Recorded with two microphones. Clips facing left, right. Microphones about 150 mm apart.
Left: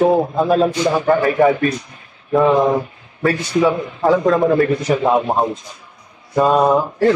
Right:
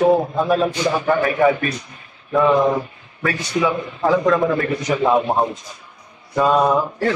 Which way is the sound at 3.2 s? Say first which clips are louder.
Left 5 dB; 30° left (ahead or behind).